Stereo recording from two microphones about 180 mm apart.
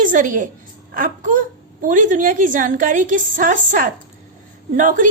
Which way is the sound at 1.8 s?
45° right (ahead or behind).